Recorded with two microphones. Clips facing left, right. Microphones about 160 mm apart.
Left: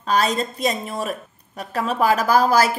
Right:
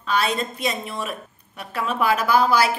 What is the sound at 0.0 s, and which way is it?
A woman's voice, 40° left (ahead or behind).